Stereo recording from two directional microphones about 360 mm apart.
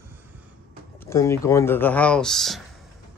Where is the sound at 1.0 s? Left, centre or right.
Centre.